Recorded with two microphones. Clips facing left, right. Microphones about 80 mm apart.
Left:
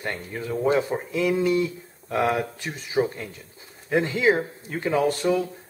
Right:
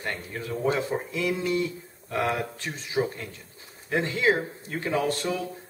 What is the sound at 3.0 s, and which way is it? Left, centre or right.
Speech, centre.